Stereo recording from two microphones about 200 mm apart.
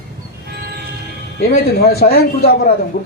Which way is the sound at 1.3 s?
50° left (ahead or behind).